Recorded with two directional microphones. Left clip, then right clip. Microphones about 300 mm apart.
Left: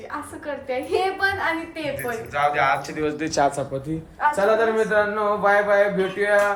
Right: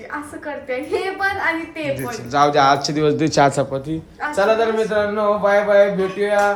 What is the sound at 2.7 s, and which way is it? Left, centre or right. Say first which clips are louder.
Speech: right 7 dB; centre.